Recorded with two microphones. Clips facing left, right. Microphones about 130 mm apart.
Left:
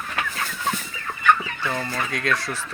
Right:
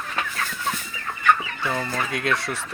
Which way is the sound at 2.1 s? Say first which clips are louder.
Even; 25° right (ahead or behind).